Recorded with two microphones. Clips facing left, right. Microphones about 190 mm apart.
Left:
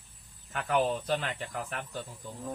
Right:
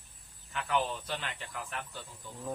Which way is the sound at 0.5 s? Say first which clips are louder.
Left 4 dB; 40° left (ahead or behind).